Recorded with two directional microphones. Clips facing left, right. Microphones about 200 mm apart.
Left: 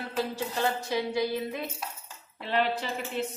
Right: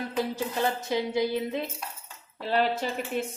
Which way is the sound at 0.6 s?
20° right (ahead or behind).